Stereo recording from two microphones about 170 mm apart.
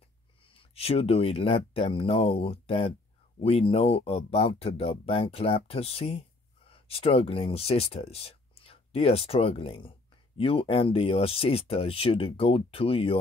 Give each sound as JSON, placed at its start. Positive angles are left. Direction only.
{"t": 0.5, "sound": "speech", "side_deg": 35}